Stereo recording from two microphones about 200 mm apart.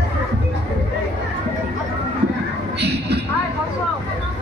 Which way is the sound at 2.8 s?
55° right (ahead or behind).